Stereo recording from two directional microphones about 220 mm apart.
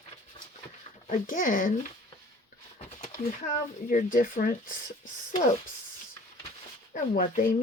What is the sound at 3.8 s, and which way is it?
Speech, 40° left (ahead or behind).